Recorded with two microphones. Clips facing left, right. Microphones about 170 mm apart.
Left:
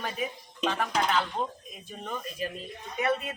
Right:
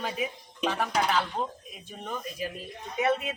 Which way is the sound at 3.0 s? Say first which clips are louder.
Right 2 dB; 20° right (ahead or behind).